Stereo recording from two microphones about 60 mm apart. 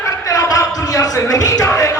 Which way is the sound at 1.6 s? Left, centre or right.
Left.